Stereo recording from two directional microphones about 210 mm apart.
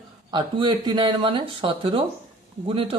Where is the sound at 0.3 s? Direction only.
20° right (ahead or behind).